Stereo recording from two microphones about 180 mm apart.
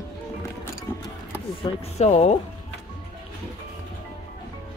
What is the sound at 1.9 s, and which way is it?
Speech, 40° left (ahead or behind).